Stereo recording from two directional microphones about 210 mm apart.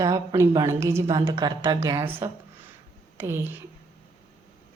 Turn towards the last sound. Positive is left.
turn(degrees=-10)  # may be behind; listen again after turning